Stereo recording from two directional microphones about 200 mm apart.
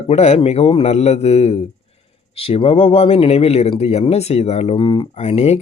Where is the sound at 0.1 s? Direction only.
30° left (ahead or behind).